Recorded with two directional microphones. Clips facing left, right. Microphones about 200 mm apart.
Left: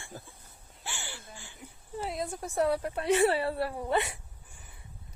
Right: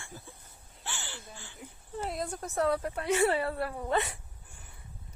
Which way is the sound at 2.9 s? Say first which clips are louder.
Left 3 dB; 30° left (ahead or behind).